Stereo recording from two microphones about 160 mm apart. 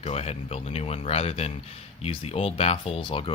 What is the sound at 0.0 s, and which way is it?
Speech, 40° left (ahead or behind).